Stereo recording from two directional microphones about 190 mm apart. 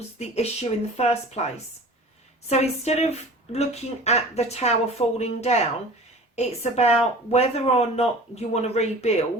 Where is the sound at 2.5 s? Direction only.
35° left (ahead or behind).